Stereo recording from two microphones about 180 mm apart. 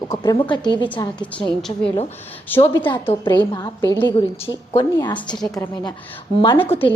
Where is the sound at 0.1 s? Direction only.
25° left (ahead or behind).